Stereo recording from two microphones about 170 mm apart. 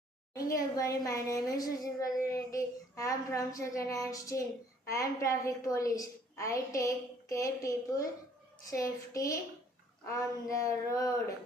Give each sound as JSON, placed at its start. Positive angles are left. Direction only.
{"t": 0.3, "sound": "a woman's voice", "side_deg": 20}